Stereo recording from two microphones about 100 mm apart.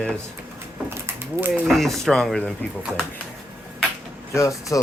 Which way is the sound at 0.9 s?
25° right (ahead or behind).